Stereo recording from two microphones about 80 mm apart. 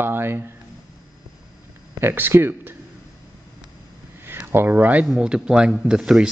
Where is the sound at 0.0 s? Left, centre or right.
Right.